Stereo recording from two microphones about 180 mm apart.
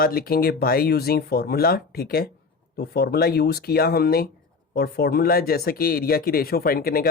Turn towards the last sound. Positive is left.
turn(degrees=55)  # may be behind; listen again after turning